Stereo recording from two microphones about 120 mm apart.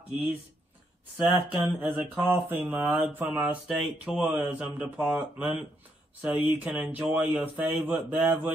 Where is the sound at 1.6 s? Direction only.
15° right (ahead or behind).